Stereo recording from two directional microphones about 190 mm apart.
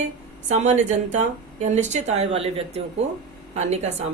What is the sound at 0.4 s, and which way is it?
Speech, 35° right (ahead or behind).